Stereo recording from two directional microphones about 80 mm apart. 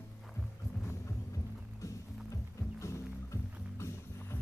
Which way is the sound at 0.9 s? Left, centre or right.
Left.